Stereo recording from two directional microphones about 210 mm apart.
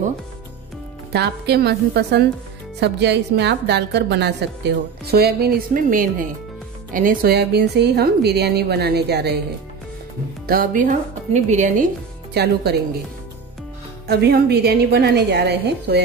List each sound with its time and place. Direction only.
1.1 s a woman's voice: 50° right (ahead or behind)
10.4 s speech: 45° right (ahead or behind)
12.4 s a woman's voice: 50° right (ahead or behind)
14.0 s a woman's voice: 50° right (ahead or behind)